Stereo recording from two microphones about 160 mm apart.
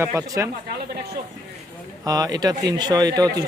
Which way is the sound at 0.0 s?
15° right (ahead or behind).